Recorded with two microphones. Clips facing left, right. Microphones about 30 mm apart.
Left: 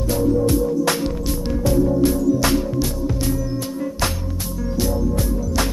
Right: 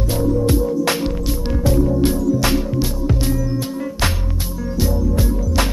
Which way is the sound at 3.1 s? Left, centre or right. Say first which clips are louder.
Right 2 dB; right.